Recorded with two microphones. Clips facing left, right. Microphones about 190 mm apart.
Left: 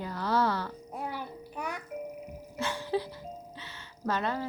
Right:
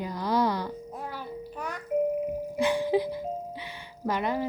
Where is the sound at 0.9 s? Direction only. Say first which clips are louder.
Right 1 dB; 15° left (ahead or behind).